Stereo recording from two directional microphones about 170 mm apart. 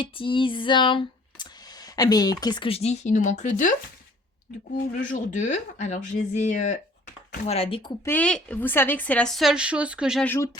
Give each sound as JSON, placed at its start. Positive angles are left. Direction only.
{"t": 0.0, "sound": "a sound", "side_deg": 30}
{"t": 2.0, "sound": "speech", "side_deg": 20}
{"t": 4.9, "sound": "speech", "side_deg": 50}
{"t": 8.0, "sound": "a woman's voice", "side_deg": 10}
{"t": 10.2, "sound": "speech", "side_deg": 15}